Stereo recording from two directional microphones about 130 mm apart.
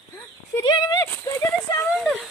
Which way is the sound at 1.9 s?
5° right (ahead or behind).